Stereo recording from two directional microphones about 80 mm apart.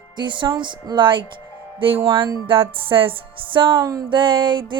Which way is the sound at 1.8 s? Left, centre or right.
Right.